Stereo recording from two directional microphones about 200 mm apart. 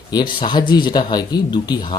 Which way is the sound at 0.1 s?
20° left (ahead or behind).